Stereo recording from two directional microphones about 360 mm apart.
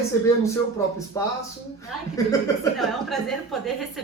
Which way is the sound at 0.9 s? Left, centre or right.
Centre.